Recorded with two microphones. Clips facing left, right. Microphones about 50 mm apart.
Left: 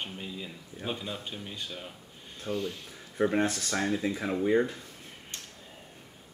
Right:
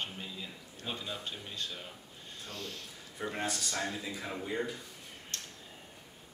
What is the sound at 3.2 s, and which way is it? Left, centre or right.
Speech, left.